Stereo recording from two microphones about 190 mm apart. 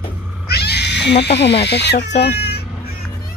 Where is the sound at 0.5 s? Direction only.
60° left (ahead or behind).